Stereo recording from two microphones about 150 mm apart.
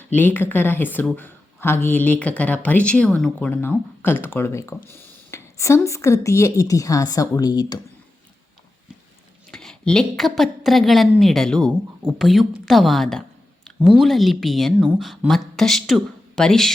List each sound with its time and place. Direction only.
0.2 s speech: 15° left (ahead or behind)
3.5 s speech: 15° left (ahead or behind)
9.5 s a woman's voice: 5° left (ahead or behind)